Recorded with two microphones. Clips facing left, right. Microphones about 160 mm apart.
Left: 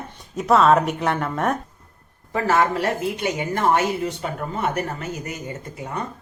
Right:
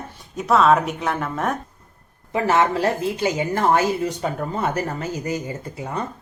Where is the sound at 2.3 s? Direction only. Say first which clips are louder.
Right 1 dB; 20° right (ahead or behind).